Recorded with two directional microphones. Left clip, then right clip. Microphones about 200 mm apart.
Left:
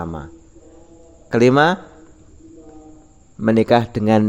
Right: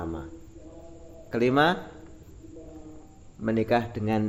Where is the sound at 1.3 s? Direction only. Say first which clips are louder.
Left 9 dB; 55° left (ahead or behind).